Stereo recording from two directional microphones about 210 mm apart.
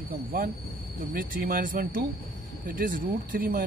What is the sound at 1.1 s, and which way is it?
Speech, 40° right (ahead or behind).